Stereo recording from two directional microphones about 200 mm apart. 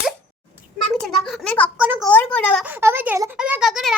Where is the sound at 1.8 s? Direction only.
5° right (ahead or behind).